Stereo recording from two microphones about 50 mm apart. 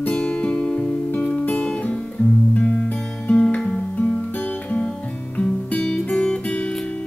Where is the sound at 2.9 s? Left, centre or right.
Centre.